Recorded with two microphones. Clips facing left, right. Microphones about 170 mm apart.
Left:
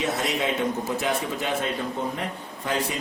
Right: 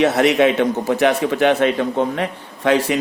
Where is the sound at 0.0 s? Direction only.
75° right (ahead or behind).